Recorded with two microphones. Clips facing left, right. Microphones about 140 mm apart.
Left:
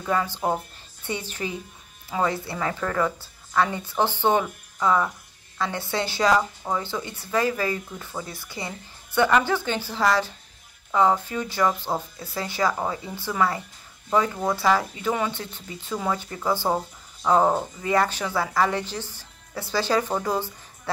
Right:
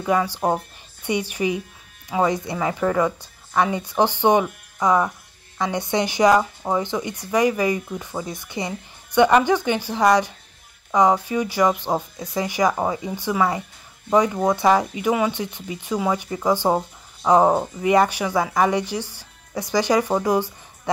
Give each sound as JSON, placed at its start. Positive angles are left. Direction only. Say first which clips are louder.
{"t": 0.0, "sound": "speech", "louder": "right 4 dB", "side_deg": -15}